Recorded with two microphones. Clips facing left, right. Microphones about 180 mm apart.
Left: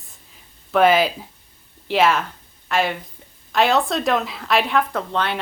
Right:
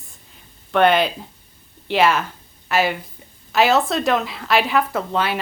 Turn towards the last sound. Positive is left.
turn(degrees=-5)  # may be behind; listen again after turning